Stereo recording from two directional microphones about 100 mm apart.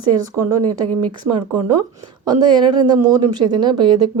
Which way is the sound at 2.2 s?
45° right (ahead or behind).